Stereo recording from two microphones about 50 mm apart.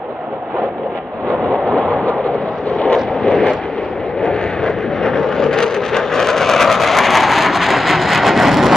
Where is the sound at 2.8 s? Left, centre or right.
Left.